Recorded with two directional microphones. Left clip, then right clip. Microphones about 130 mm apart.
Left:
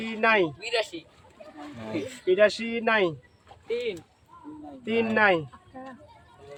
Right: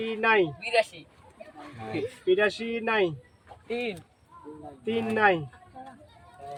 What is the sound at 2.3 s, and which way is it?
A man's voice, 10° left (ahead or behind).